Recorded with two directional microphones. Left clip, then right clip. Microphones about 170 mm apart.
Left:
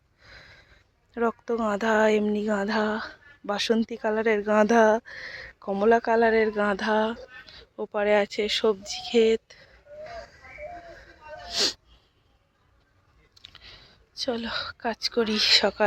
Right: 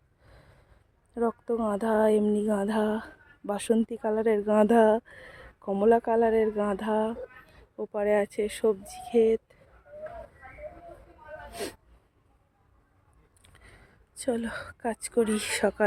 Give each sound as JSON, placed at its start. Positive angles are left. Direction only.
{"t": 0.2, "sound": "a sound", "side_deg": -10}
{"t": 1.5, "sound": "speech", "side_deg": -10}
{"t": 11.5, "sound": "speech", "side_deg": -5}
{"t": 13.5, "sound": "speech", "side_deg": -25}